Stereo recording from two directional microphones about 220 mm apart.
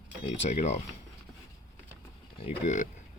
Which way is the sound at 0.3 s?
30° left (ahead or behind).